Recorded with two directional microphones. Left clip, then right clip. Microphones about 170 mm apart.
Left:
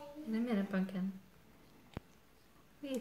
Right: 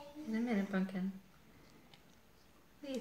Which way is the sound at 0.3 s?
45° left (ahead or behind).